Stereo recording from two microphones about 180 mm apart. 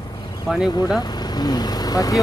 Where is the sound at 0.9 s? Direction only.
20° left (ahead or behind).